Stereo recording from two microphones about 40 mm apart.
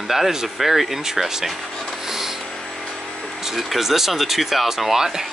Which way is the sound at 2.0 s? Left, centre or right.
Centre.